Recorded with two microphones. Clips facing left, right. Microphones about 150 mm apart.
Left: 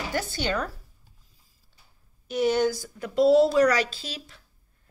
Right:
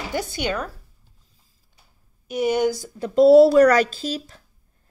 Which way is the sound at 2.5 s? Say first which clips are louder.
Right 3 dB; 15° right (ahead or behind).